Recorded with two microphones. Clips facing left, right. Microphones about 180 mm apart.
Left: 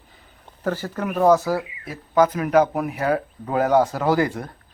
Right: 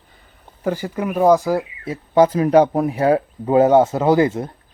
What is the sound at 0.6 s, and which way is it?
Speech, 10° right (ahead or behind).